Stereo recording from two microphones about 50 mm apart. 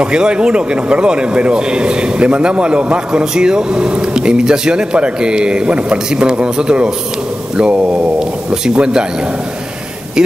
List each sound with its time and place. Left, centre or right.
0.0 s speech: centre
8.2 s a sound: centre
10.2 s speech: centre